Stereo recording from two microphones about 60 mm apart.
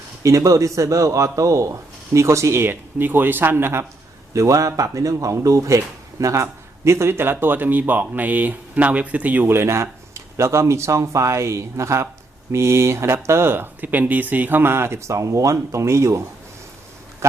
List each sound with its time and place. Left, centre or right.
0.2 s speech: right
4.4 s speech: right
9.5 s speech: right
15.5 s speech: right